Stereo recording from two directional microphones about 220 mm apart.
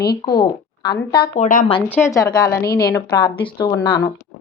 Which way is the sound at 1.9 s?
10° left (ahead or behind).